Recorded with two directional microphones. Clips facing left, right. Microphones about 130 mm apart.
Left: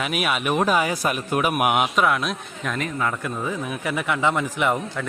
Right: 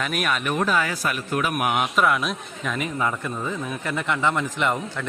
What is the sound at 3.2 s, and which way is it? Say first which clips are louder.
A man's voice: left 1 dB; 10° left (ahead or behind).